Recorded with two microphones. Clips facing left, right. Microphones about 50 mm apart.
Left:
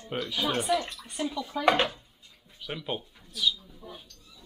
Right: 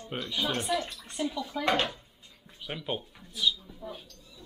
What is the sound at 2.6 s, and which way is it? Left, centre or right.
Speech, centre.